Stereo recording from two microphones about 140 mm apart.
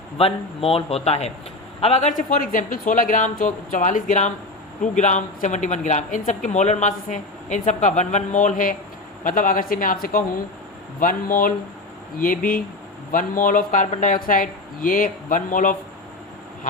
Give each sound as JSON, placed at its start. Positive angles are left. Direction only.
{"t": 0.2, "sound": "a man's voice", "side_deg": 40}
{"t": 2.1, "sound": "speech", "side_deg": 75}